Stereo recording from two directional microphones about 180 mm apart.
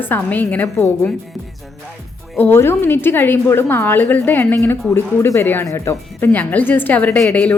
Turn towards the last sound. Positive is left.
turn(degrees=10)  # may be behind; listen again after turning